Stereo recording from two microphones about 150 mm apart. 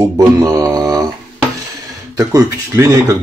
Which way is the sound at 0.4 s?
20° right (ahead or behind).